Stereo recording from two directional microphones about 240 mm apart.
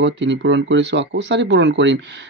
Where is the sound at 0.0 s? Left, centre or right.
Right.